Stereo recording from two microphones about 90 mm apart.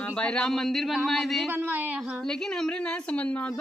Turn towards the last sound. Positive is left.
turn(degrees=15)  # may be behind; listen again after turning